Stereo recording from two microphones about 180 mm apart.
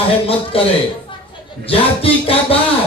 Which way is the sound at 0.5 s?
30° left (ahead or behind).